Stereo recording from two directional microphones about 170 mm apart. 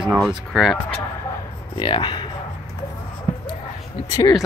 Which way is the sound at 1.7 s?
30° left (ahead or behind).